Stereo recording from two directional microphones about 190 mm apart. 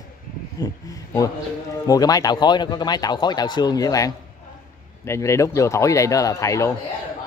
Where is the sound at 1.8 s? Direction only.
20° left (ahead or behind).